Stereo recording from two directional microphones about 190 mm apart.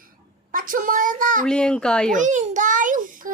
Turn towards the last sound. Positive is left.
turn(degrees=-45)  # may be behind; listen again after turning